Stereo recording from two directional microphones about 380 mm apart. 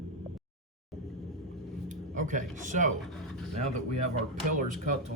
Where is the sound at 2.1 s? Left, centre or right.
Centre.